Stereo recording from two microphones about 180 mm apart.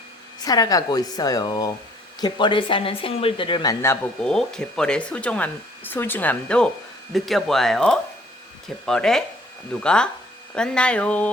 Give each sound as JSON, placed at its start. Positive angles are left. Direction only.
{"t": 0.3, "sound": "speech", "side_deg": 20}
{"t": 4.2, "sound": "speech", "side_deg": 5}